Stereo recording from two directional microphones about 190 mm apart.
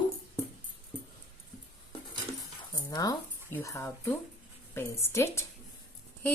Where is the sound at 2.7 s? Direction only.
20° left (ahead or behind).